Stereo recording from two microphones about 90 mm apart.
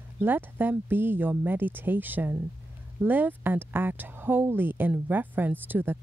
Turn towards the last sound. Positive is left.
turn(degrees=-20)  # may be behind; listen again after turning